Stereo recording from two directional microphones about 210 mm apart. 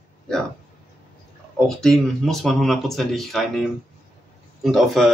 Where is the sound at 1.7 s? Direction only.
Centre (ahead or behind).